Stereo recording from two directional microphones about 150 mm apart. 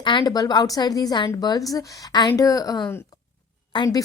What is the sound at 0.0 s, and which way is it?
Speech, 30° left (ahead or behind).